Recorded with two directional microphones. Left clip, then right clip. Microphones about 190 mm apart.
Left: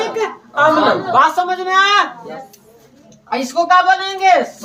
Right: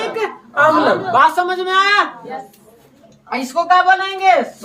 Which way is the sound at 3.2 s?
10° right (ahead or behind).